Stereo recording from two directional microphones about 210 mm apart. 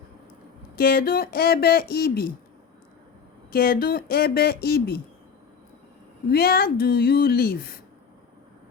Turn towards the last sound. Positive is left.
turn(degrees=45)  # may be behind; listen again after turning